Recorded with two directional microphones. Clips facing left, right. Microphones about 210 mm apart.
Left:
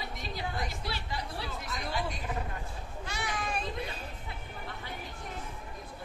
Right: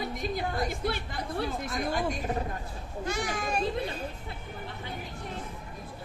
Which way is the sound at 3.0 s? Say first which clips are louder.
Right 5 dB; 45° right (ahead or behind).